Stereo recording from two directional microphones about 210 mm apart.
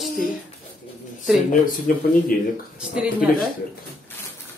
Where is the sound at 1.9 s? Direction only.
45° left (ahead or behind).